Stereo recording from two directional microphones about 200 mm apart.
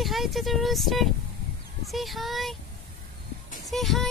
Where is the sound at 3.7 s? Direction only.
Centre (ahead or behind).